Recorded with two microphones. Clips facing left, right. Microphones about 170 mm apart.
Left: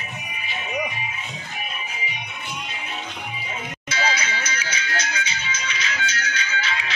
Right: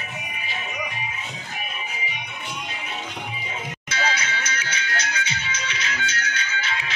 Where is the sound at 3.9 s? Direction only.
60° right (ahead or behind).